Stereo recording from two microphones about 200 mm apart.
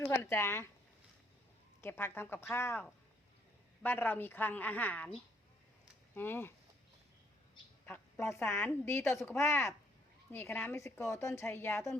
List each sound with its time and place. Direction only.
0.1 s a woman's voice: 10° left (ahead or behind)
1.8 s a woman's voice: 10° left (ahead or behind)
3.8 s a woman's voice: 10° left (ahead or behind)
6.1 s a woman's voice: 10° left (ahead or behind)
7.9 s a woman's voice: 10° left (ahead or behind)